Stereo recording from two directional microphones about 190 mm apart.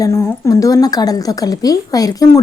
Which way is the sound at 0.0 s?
15° left (ahead or behind).